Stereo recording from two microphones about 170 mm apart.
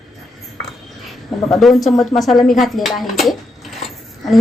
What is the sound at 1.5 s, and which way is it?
Speech, centre (ahead or behind).